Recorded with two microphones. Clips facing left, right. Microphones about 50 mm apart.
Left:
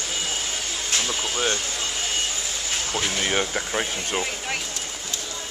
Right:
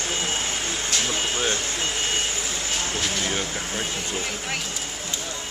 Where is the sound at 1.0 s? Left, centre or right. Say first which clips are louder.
Right 1 dB; centre.